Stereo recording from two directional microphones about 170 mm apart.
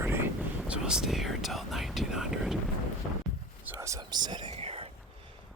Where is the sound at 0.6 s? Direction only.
5° right (ahead or behind).